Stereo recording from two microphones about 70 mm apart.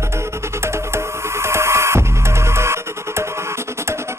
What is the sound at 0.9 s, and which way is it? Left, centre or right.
Music, right.